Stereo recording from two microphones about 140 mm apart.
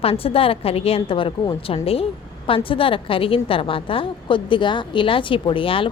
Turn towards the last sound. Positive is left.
turn(degrees=40)  # may be behind; listen again after turning